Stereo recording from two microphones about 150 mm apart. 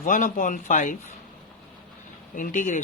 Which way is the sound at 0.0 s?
65° left (ahead or behind).